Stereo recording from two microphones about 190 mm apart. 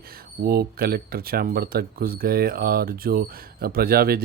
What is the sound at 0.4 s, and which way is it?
Speech, 55° right (ahead or behind).